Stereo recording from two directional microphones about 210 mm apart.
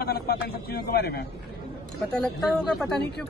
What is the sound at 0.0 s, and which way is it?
A man's voice, 50° left (ahead or behind).